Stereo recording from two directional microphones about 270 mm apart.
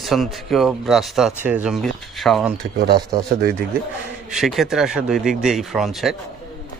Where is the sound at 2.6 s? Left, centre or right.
Right.